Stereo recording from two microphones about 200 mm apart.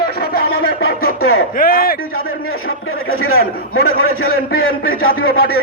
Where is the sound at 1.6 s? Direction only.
45° left (ahead or behind).